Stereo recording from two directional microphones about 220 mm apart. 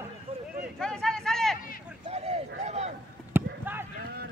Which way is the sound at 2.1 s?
30° right (ahead or behind).